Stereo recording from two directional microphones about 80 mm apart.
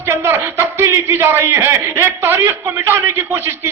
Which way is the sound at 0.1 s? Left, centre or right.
Right.